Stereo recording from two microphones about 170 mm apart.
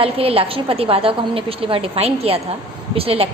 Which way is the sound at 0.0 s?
35° right (ahead or behind).